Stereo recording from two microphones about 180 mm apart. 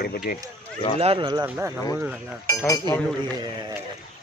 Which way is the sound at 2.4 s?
20° left (ahead or behind).